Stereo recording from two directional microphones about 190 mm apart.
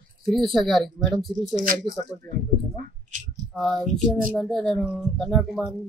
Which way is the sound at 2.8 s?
40° right (ahead or behind).